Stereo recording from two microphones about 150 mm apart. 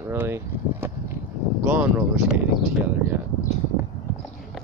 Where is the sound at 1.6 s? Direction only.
10° right (ahead or behind).